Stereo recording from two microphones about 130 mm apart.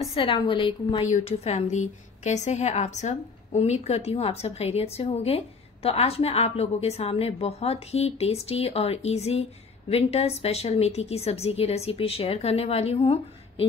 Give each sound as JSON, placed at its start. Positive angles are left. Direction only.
{"t": 0.1, "sound": "a woman's voice", "side_deg": 40}
{"t": 1.0, "sound": "a woman's voice", "side_deg": 60}